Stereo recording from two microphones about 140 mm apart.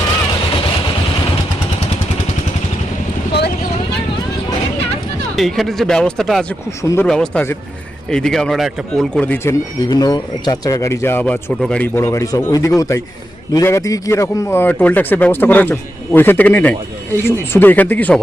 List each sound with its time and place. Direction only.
5.4 s a man's voice: centre (ahead or behind)
6.8 s speech: 20° left (ahead or behind)
7.1 s a man's voice: 5° left (ahead or behind)
9.2 s a man's voice: 15° left (ahead or behind)